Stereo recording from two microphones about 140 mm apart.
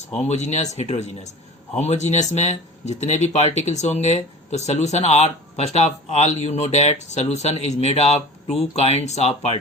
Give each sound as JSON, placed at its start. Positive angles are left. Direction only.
{"t": 0.1, "sound": "speech", "side_deg": 50}